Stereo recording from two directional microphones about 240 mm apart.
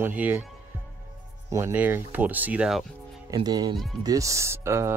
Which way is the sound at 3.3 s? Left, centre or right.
Centre.